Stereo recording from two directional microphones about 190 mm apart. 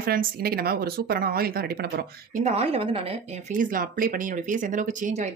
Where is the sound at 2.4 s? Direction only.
35° right (ahead or behind).